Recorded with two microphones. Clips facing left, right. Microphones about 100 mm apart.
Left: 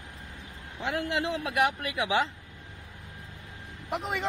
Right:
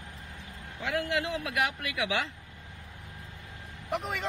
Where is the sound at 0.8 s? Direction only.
25° left (ahead or behind).